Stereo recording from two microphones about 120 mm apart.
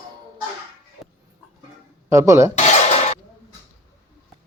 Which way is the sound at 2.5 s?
70° left (ahead or behind).